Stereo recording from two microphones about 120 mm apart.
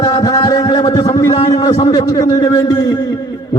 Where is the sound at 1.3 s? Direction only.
35° left (ahead or behind).